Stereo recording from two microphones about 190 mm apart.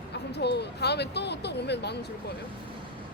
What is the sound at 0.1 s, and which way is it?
Speech, 60° left (ahead or behind).